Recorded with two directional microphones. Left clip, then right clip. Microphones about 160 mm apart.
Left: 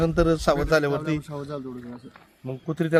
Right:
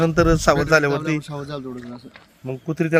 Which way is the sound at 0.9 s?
55° right (ahead or behind).